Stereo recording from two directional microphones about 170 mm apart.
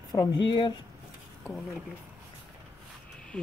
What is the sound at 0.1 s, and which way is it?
Speech, 20° left (ahead or behind).